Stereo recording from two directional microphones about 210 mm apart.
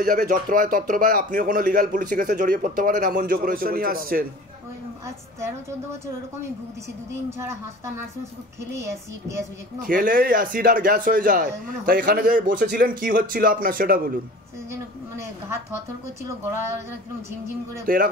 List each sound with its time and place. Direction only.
0.0 s speech: 45° right (ahead or behind)
7.2 s a woman's voice: 10° right (ahead or behind)
9.8 s speech: 40° right (ahead or behind)
14.7 s a woman's voice: 10° right (ahead or behind)
17.9 s speech: 40° right (ahead or behind)